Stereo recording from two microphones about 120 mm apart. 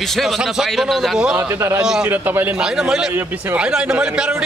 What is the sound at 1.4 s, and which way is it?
Speech, 20° right (ahead or behind).